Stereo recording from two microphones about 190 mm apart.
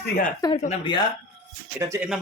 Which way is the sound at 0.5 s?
35° left (ahead or behind).